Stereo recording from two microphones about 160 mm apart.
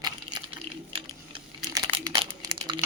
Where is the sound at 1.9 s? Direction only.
30° right (ahead or behind).